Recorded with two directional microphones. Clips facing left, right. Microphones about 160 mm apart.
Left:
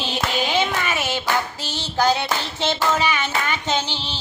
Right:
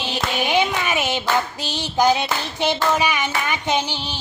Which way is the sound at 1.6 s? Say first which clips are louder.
Right 2 dB; 15° right (ahead or behind).